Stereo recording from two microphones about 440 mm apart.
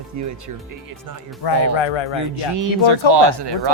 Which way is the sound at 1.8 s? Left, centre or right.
Left.